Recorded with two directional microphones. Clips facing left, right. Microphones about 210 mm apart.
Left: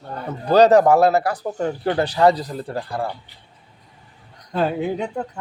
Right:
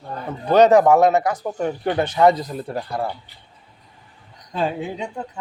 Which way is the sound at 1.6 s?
20° right (ahead or behind).